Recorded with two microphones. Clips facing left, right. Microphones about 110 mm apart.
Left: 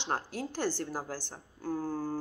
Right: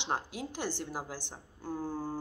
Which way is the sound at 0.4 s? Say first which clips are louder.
Left 4 dB; 15° right (ahead or behind).